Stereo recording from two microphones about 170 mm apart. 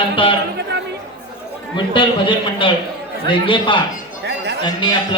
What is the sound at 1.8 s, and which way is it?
Speech, 30° left (ahead or behind).